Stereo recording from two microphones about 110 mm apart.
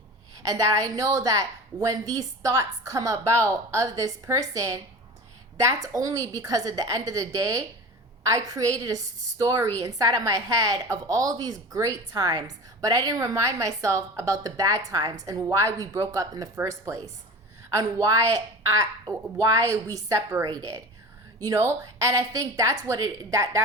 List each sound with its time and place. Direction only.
0.4 s a woman's voice: 30° right (ahead or behind)